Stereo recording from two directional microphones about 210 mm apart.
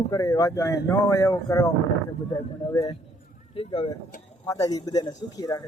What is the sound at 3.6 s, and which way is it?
A man's voice, 20° left (ahead or behind).